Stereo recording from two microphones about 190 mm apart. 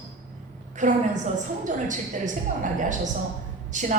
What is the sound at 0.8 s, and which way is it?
A woman's voice, 40° right (ahead or behind).